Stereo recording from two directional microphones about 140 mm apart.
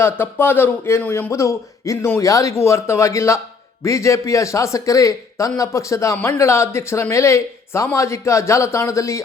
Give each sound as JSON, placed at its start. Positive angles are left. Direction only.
{"t": 0.0, "sound": "a man's voice", "side_deg": 15}